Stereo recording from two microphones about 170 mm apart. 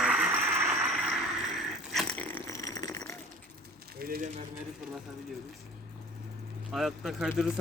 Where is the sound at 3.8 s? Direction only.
65° right (ahead or behind).